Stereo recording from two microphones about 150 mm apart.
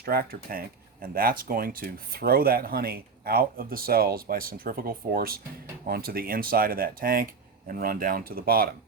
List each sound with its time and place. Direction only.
0.0 s speech: 90° right
1.0 s speech: 75° right (ahead or behind)